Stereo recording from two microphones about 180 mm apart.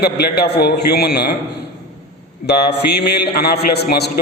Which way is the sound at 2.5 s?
65° left (ahead or behind).